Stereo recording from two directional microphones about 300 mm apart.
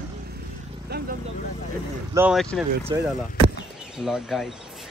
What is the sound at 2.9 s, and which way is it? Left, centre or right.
Speech, centre.